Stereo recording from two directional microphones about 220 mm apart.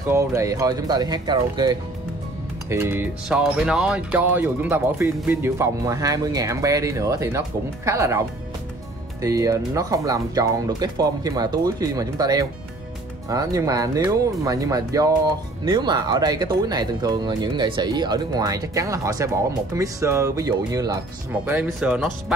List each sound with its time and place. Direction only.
0.0 s speech: 10° right (ahead or behind)
21.5 s speech: 5° right (ahead or behind)